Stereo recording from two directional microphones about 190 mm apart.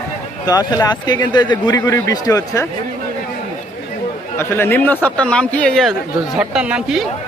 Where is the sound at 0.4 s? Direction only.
20° left (ahead or behind).